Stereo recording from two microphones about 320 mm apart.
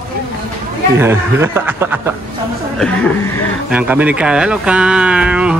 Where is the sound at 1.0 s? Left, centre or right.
Centre.